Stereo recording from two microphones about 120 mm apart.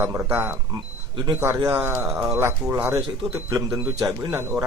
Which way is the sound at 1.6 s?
20° right (ahead or behind).